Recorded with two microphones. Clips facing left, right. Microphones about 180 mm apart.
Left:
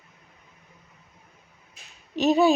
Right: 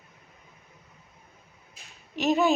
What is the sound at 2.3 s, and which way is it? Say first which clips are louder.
Speech: left 4 dB; 15° left (ahead or behind).